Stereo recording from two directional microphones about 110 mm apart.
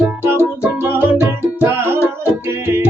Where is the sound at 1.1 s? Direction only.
25° left (ahead or behind).